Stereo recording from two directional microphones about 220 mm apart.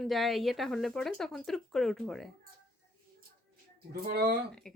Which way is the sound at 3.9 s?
45° right (ahead or behind).